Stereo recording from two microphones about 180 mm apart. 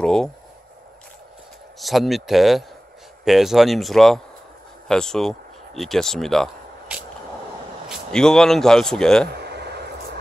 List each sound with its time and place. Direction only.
0.0 s speech: 5° left (ahead or behind)
1.8 s speech: centre (ahead or behind)
9.3 s a sound: 65° right (ahead or behind)